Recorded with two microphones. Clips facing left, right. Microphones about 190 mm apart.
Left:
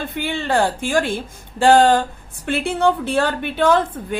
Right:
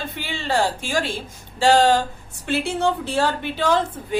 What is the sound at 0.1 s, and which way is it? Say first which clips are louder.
A woman's voice: left 4 dB; 55° left (ahead or behind).